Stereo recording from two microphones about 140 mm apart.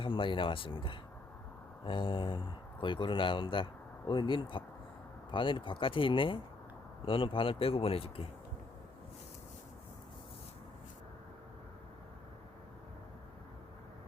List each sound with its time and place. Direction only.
0.0 s speech: 35° left (ahead or behind)